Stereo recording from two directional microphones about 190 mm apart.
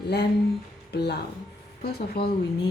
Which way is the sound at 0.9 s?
60° left (ahead or behind).